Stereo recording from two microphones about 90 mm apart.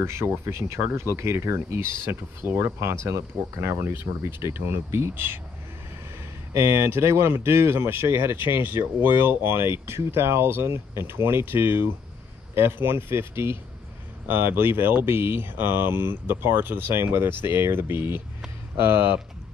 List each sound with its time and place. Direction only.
0.0 s speech: 30° right (ahead or behind)
6.5 s speech: 30° right (ahead or behind)